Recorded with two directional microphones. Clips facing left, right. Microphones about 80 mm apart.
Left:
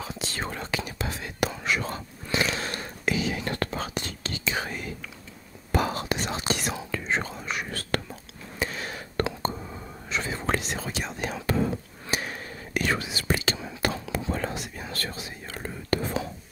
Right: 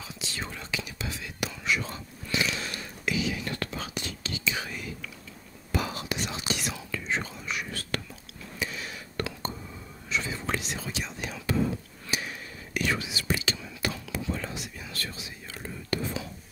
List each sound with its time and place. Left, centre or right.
0.0 s whispering: left
8.5 s a sound: left
9.4 s whispering: left
14.3 s whispering: left